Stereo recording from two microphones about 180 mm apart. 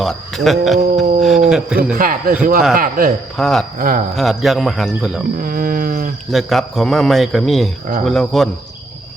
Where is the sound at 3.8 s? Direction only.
50° right (ahead or behind).